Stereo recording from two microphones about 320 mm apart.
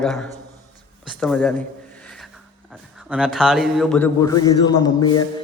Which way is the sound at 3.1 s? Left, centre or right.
Centre.